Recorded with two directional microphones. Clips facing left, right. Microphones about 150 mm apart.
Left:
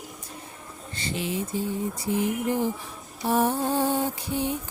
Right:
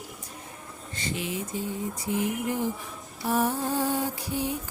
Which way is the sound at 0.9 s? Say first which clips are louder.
Left 2 dB; 30° left (ahead or behind).